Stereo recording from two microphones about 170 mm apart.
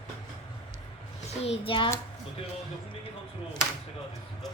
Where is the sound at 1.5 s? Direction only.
30° left (ahead or behind).